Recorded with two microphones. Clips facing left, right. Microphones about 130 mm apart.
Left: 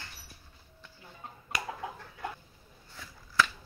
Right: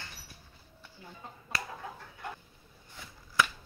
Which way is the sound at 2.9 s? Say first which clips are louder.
Left 1 dB; 15° right (ahead or behind).